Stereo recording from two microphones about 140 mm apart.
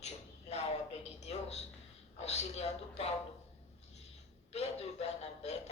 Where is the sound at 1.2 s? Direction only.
50° left (ahead or behind).